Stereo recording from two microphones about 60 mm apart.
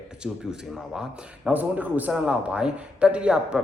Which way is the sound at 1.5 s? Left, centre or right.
Right.